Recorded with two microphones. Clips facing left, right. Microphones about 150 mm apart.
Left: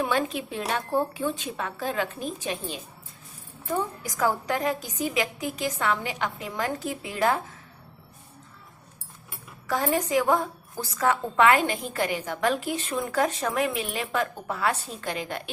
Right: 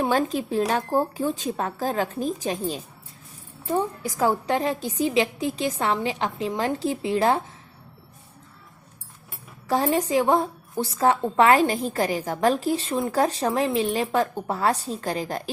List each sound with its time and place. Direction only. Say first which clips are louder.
0.0 s a woman's voice: right 4 dB; 40° right (ahead or behind)
9.6 s a woman's voice: right 3 dB; 30° right (ahead or behind)